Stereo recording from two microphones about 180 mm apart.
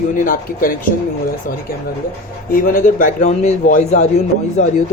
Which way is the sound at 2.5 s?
50° left (ahead or behind).